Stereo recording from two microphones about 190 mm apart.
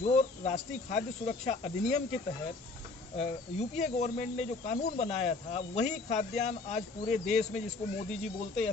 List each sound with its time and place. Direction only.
0.0 s speech: 40° left (ahead or behind)
3.2 s speech: 35° left (ahead or behind)
8.1 s speech: centre (ahead or behind)